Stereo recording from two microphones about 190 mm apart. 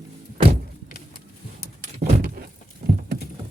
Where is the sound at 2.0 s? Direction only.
45° right (ahead or behind).